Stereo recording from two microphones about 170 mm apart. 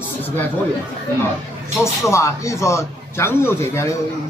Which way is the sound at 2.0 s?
15° left (ahead or behind).